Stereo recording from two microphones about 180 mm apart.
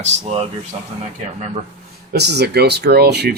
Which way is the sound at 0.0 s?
35° right (ahead or behind).